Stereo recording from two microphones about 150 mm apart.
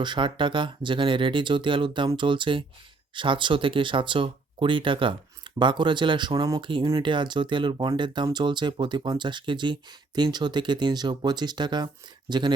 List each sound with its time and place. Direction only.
0.0 s speech: 30° right (ahead or behind)